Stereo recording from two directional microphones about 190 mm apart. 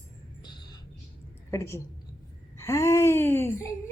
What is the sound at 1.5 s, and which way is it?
A woman's voice, 15° left (ahead or behind).